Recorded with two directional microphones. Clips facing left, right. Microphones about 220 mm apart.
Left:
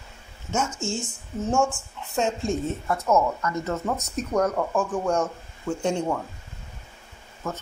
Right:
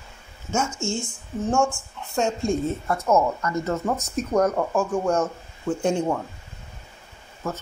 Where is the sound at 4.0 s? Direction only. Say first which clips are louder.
Right 2 dB; 5° right (ahead or behind).